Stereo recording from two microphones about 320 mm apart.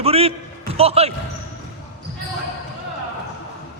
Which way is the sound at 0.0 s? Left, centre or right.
Centre.